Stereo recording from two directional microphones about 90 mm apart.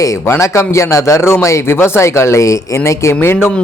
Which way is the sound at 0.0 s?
35° left (ahead or behind).